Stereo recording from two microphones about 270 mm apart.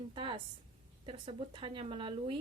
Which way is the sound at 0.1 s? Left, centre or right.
Centre.